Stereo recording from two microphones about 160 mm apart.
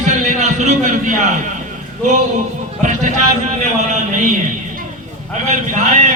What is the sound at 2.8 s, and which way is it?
Speech, 50° right (ahead or behind).